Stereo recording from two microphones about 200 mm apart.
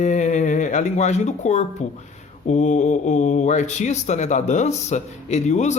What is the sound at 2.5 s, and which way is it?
Speech, 35° left (ahead or behind).